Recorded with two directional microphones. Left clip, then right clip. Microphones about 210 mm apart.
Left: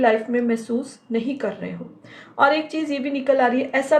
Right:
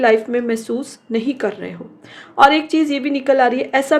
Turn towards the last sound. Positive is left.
turn(degrees=-55)  # may be behind; listen again after turning